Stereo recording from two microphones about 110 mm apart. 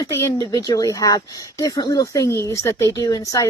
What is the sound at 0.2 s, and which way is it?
Speech, 30° left (ahead or behind).